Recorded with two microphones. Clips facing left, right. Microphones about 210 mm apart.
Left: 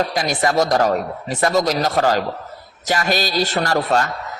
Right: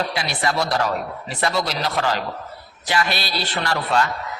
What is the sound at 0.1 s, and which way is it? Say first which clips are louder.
A man's voice: left 5 dB; 45° left (ahead or behind).